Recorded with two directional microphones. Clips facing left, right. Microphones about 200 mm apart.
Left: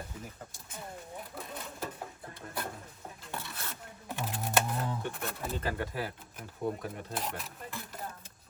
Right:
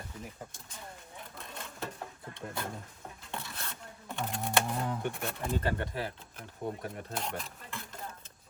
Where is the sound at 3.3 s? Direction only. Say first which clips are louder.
Even; 5° left (ahead or behind).